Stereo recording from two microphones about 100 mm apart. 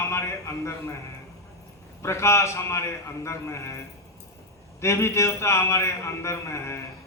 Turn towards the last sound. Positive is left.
turn(degrees=25)  # may be behind; listen again after turning